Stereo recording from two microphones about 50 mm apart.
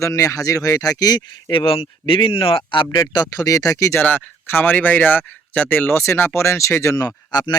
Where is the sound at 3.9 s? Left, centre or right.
Left.